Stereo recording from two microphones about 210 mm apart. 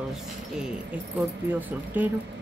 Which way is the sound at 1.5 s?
10° right (ahead or behind).